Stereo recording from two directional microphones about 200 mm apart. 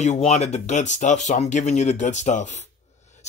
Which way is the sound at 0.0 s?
35° left (ahead or behind).